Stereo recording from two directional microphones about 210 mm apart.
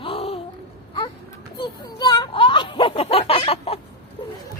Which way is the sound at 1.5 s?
20° left (ahead or behind).